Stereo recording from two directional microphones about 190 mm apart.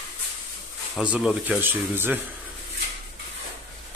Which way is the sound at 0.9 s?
5° right (ahead or behind).